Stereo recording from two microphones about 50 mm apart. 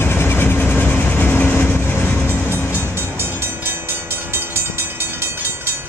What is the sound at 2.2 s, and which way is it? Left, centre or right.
Train, left.